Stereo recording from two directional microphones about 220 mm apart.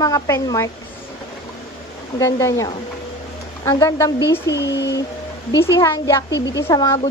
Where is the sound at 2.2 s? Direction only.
15° left (ahead or behind).